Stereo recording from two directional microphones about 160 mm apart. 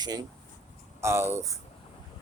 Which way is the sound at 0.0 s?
25° right (ahead or behind).